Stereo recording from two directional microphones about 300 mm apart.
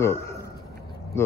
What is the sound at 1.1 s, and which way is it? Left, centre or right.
Speech, centre.